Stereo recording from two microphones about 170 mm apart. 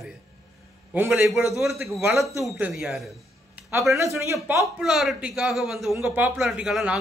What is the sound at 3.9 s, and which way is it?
Speech, 15° right (ahead or behind).